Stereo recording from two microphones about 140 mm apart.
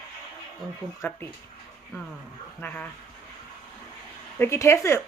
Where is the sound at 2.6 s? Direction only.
10° left (ahead or behind).